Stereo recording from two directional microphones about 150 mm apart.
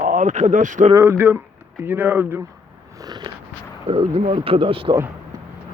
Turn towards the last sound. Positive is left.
turn(degrees=-20)  # may be behind; listen again after turning